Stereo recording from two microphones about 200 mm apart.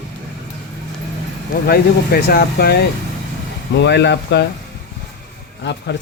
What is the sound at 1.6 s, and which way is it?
Speech, 50° left (ahead or behind).